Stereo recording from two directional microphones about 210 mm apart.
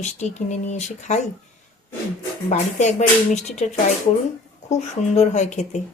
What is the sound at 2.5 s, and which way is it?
Speech, 35° left (ahead or behind).